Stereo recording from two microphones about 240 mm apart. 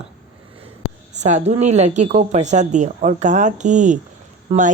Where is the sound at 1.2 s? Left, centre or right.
Right.